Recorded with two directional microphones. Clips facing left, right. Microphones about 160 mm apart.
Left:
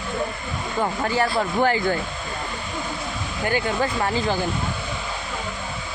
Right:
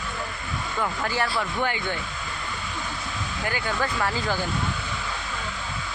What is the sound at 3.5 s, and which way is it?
Speech, 30° left (ahead or behind).